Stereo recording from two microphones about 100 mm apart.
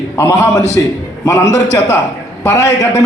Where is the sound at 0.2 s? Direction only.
25° left (ahead or behind).